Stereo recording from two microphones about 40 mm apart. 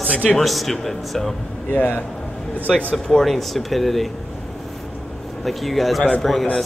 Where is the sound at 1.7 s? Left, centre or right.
Left.